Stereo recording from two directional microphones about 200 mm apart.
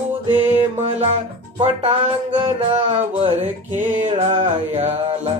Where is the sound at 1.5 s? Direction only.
25° right (ahead or behind).